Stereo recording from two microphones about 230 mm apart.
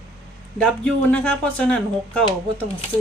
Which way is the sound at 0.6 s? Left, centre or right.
Centre.